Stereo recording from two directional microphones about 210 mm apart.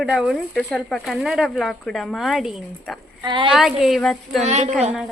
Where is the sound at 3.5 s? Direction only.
Centre (ahead or behind).